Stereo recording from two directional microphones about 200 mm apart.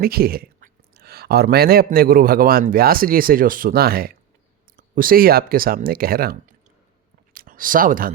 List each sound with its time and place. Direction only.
0.0 s speech: 50° right (ahead or behind)